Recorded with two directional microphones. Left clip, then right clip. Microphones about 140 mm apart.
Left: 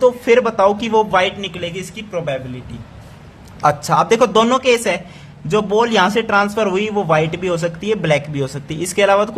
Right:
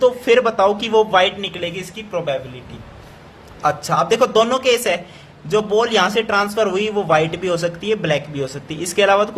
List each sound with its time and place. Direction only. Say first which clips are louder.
0.0 s speech: left 1 dB; 25° left (ahead or behind)
3.6 s speech: left 3 dB; 40° left (ahead or behind); by 7.9 s 20° left (ahead or behind)
7.9 s speech: left 4 dB; 35° left (ahead or behind)